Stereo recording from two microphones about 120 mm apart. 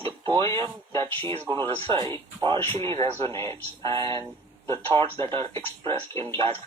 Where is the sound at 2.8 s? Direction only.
60° right (ahead or behind).